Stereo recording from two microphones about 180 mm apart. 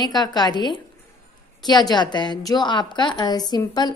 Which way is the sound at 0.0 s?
25° left (ahead or behind).